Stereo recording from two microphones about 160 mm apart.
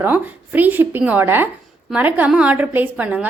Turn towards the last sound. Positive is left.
turn(degrees=-10)  # may be behind; listen again after turning